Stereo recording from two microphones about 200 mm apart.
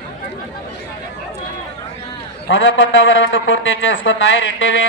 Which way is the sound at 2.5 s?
70° left (ahead or behind).